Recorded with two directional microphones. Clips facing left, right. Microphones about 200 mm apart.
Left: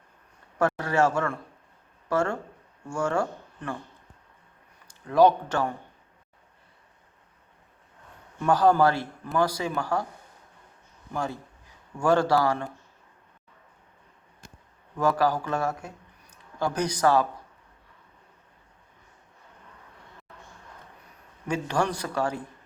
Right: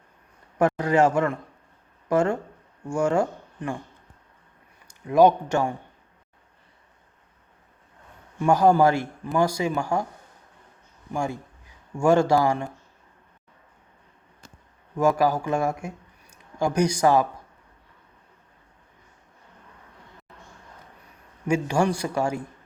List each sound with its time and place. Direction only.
0.6 s speech: 15° right (ahead or behind)
5.0 s speech: 15° right (ahead or behind)
8.4 s speech: 10° right (ahead or behind)
11.1 s speech: 15° right (ahead or behind)
14.9 s speech: 10° right (ahead or behind)
21.4 s speech: 10° right (ahead or behind)